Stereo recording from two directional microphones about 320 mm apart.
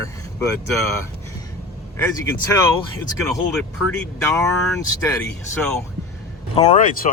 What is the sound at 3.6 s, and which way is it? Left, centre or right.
Speech, centre.